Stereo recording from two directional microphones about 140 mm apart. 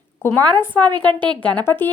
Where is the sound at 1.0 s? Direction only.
35° right (ahead or behind).